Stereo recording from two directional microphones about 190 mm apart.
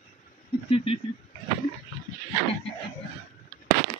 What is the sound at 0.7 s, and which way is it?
Speech, 30° left (ahead or behind).